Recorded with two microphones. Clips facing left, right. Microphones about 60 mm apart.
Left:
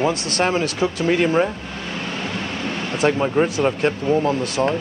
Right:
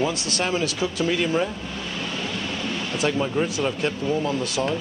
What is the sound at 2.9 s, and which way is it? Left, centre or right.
Speech, left.